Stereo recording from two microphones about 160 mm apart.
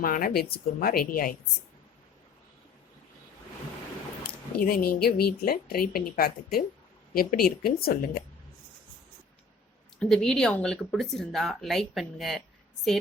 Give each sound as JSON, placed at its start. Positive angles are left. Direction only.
{"t": 0.0, "sound": "a woman's voice", "side_deg": 65}
{"t": 4.6, "sound": "a woman's voice", "side_deg": 70}
{"t": 10.0, "sound": "speech", "side_deg": 5}